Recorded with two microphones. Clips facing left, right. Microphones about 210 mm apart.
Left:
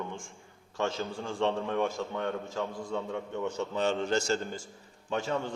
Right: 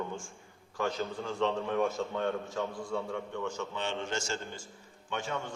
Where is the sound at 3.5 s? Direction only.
40° left (ahead or behind).